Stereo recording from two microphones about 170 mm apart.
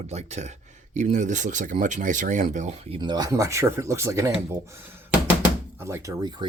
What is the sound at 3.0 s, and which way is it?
Speech, 25° right (ahead or behind).